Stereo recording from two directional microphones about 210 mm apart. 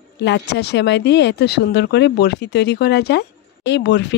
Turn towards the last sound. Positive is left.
turn(degrees=55)  # may be behind; listen again after turning